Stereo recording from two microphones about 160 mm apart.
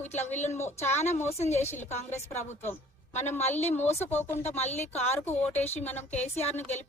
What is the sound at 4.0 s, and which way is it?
Speech, 15° left (ahead or behind).